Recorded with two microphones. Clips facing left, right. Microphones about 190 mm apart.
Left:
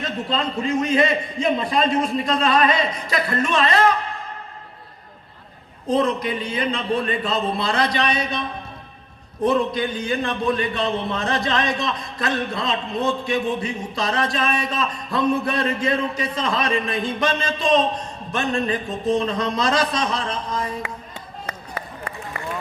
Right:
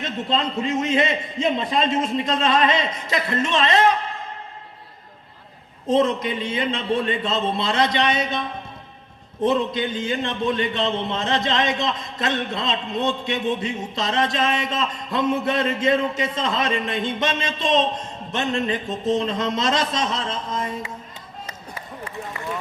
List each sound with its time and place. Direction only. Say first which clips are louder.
0.0 s a man's voice: even; 20° right (ahead or behind)
5.9 s a man's voice: right 1 dB; 20° right (ahead or behind)
21.4 s run: left 5 dB; 60° left (ahead or behind)